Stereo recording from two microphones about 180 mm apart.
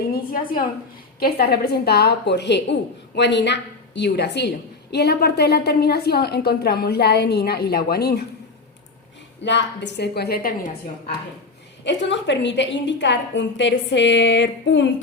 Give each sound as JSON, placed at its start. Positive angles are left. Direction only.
{"t": 1.2, "sound": "a woman's voice", "side_deg": 60}
{"t": 9.4, "sound": "a woman's voice", "side_deg": 75}
{"t": 11.9, "sound": "a woman's voice", "side_deg": 80}